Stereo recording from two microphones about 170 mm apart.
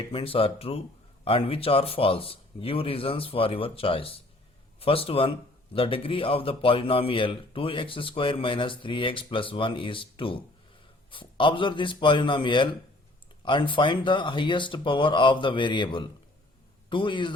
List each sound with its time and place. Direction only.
0.1 s a man's voice: 35° left (ahead or behind)